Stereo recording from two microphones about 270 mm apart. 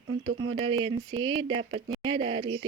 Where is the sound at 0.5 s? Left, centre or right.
Centre.